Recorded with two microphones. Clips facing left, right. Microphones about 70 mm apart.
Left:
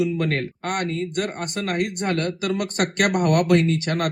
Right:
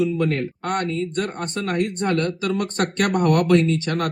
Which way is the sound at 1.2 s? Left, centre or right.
Right.